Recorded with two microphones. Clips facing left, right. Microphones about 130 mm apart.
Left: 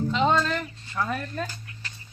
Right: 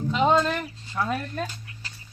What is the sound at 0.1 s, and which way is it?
Speech, 5° right (ahead or behind).